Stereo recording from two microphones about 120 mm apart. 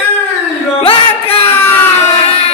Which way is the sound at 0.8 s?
50° left (ahead or behind).